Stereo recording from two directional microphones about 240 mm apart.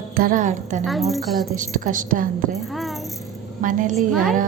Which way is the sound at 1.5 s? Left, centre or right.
Right.